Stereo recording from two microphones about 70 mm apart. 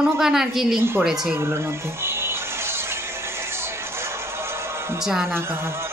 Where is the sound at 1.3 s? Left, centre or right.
Right.